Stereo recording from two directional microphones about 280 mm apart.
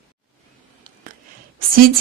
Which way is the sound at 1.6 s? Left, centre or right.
Right.